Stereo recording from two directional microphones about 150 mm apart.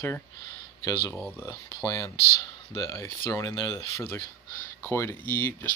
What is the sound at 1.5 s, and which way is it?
Speech, 25° left (ahead or behind).